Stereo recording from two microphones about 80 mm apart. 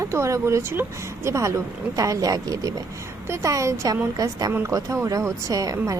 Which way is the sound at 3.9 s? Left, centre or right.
Right.